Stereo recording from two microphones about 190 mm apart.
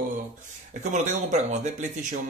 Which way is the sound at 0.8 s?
40° right (ahead or behind).